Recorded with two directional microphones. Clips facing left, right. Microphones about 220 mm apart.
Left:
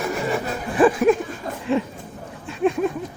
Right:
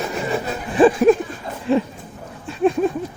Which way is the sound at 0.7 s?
30° right (ahead or behind).